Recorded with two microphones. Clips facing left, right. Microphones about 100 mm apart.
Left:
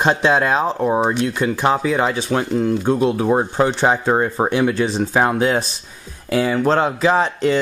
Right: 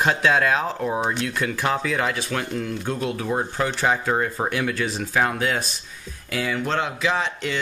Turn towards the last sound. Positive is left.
turn(degrees=40)  # may be behind; listen again after turning